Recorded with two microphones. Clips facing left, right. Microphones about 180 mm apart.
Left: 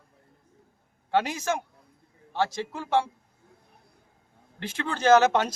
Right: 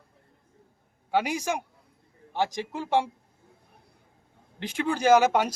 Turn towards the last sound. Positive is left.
turn(degrees=-10)  # may be behind; listen again after turning